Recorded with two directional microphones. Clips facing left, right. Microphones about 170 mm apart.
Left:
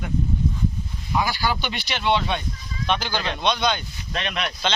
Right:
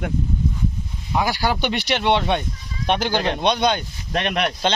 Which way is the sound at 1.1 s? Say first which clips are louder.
Right 2 dB; 65° right (ahead or behind).